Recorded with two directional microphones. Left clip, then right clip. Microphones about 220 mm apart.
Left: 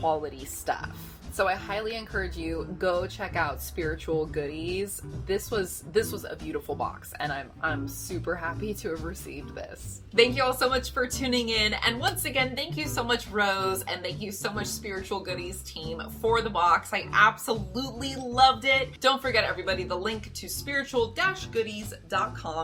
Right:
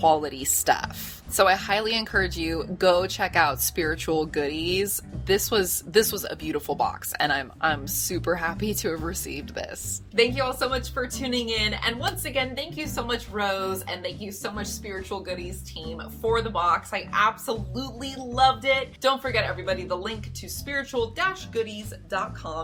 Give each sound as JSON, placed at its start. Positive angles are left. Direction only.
{"t": 0.0, "sound": "speech", "side_deg": -50}
{"t": 10.2, "sound": "a woman's voice", "side_deg": 0}